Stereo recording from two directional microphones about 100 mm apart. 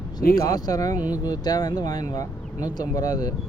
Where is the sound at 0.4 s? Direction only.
40° left (ahead or behind).